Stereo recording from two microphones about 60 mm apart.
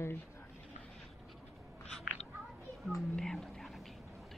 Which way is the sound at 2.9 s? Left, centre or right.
Centre.